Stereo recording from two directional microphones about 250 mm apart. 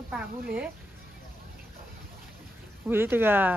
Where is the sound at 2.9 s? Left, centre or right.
Centre.